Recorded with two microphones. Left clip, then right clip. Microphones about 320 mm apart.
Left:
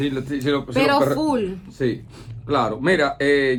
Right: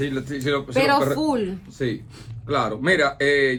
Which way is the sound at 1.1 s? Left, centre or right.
Centre.